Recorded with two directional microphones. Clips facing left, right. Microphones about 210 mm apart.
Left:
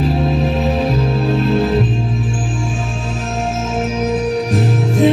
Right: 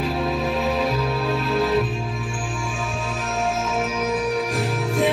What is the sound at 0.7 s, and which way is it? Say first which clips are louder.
Music: left 5 dB; 30° left (ahead or behind).